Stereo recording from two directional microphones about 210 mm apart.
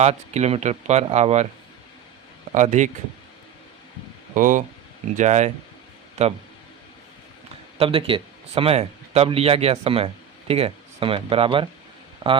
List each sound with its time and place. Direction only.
0.0 s speech: 30° right (ahead or behind)
2.5 s speech: 35° right (ahead or behind)
4.4 s speech: 40° right (ahead or behind)
7.8 s speech: 25° right (ahead or behind)